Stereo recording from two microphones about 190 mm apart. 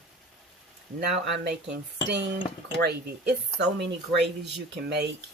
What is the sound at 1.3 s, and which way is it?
Speech, 65° right (ahead or behind).